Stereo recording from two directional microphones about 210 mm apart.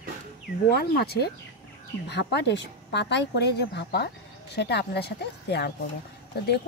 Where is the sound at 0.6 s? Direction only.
50° left (ahead or behind).